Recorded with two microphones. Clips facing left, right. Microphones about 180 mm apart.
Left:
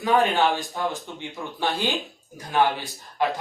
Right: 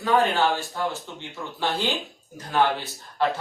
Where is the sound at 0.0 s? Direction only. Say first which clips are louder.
Left 1 dB; 15° left (ahead or behind).